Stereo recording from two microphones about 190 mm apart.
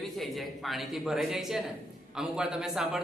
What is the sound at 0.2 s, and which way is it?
A man's voice, centre (ahead or behind).